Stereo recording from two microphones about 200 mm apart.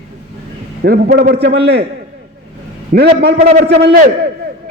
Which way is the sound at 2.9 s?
50° right (ahead or behind).